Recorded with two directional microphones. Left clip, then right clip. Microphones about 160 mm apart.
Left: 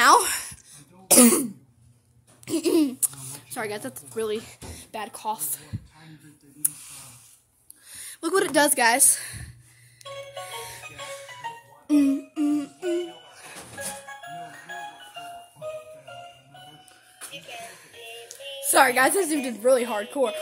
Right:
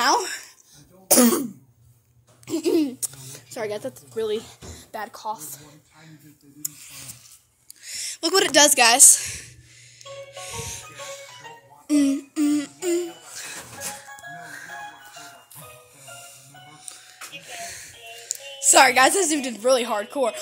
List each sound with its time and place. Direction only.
0.0 s a sound: 30° left (ahead or behind)
0.3 s a sound: 40° left (ahead or behind)
1.0 s throat clearing: 10° left (ahead or behind)
2.4 s speech: 25° left (ahead or behind)
3.0 s a sound: 15° left (ahead or behind)
3.5 s a woman's voice: 10° left (ahead or behind)
4.6 s a sound: centre (ahead or behind)
5.1 s music: 20° left (ahead or behind)
7.8 s a woman's voice: 10° left (ahead or behind)
10.0 s music: 10° left (ahead or behind)
11.9 s humming: 10° left (ahead or behind)
14.2 s music: 5° right (ahead or behind)
16.9 s child singing: centre (ahead or behind)